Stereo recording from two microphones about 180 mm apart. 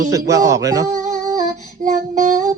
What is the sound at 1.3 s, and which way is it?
Child singing, 45° right (ahead or behind).